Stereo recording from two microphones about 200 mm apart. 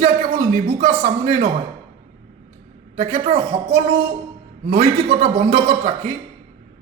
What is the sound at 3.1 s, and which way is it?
A man's voice, 30° right (ahead or behind).